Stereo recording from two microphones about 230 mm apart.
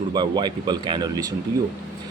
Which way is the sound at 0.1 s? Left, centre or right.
Centre.